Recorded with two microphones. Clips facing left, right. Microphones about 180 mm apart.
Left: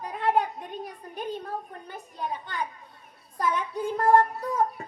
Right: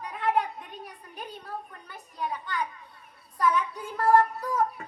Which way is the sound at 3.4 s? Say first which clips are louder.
Right 1 dB; 30° left (ahead or behind).